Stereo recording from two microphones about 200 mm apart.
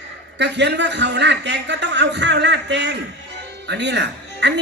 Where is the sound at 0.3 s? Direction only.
60° right (ahead or behind).